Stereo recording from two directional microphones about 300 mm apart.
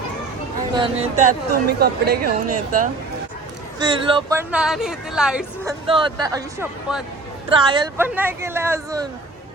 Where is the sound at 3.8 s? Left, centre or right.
Centre.